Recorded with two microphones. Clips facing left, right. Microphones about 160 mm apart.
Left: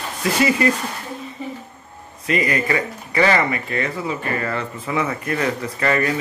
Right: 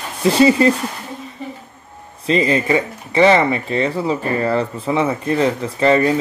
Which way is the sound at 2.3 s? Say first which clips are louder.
Right 5 dB; 25° right (ahead or behind).